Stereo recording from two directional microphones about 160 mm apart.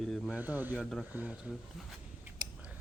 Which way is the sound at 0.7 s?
Centre (ahead or behind).